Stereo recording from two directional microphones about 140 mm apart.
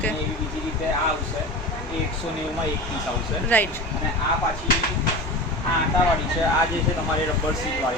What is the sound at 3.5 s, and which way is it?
Speech, 15° left (ahead or behind).